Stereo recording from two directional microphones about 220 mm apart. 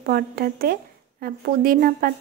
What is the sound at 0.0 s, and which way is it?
Speech, 40° right (ahead or behind).